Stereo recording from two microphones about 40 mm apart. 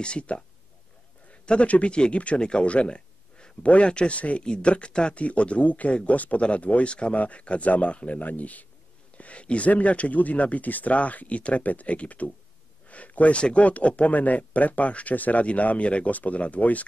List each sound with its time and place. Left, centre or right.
0.0 s speech: left
9.2 s speech: left
12.8 s a sound: left
13.4 s speech: left